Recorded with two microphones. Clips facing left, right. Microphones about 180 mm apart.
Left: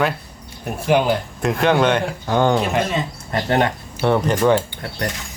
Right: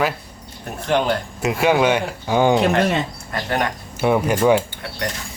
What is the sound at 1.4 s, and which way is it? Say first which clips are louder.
Speech: right 1 dB; 5° right (ahead or behind).